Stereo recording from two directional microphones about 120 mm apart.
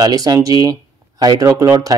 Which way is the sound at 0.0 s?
30° right (ahead or behind).